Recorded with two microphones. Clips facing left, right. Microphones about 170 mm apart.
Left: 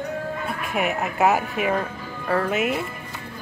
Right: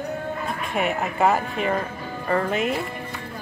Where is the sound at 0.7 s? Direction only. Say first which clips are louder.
Even; centre (ahead or behind).